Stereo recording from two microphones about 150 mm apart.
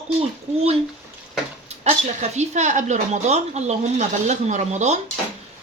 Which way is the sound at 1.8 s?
50° right (ahead or behind).